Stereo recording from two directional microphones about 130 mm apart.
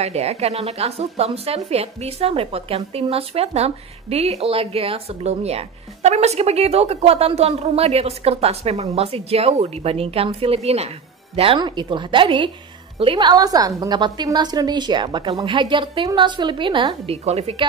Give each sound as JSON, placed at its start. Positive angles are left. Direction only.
{"t": 0.0, "sound": "speech", "side_deg": -55}
{"t": 11.3, "sound": "a woman's voice", "side_deg": -40}
{"t": 17.1, "sound": "a woman's voice", "side_deg": -55}